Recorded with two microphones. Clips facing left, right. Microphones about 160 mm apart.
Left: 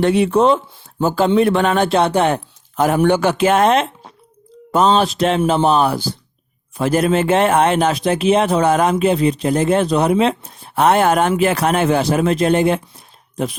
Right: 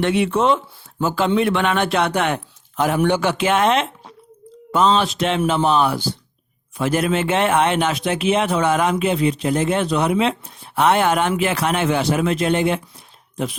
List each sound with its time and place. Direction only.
0.0 s speech: 35° left (ahead or behind)